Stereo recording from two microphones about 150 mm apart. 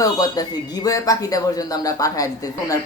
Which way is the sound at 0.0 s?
25° left (ahead or behind).